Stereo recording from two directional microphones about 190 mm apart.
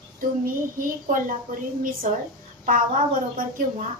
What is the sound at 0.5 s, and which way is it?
A woman's voice, 45° right (ahead or behind).